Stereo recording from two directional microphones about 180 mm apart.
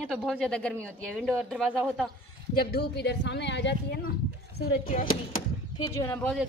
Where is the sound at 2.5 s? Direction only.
65° left (ahead or behind).